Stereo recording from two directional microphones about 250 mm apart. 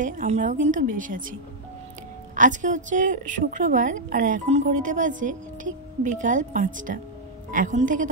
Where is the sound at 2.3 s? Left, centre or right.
Right.